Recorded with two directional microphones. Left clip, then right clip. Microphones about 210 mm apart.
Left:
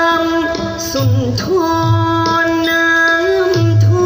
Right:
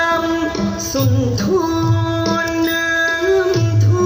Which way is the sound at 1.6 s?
35° left (ahead or behind).